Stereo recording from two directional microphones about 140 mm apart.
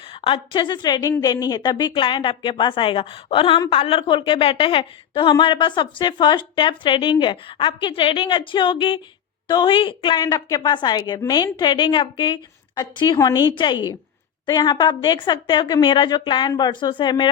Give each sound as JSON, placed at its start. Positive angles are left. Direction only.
{"t": 0.1, "sound": "a woman's voice", "side_deg": 40}